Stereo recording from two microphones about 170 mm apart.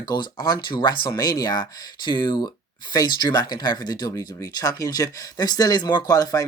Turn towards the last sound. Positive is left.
turn(degrees=20)  # may be behind; listen again after turning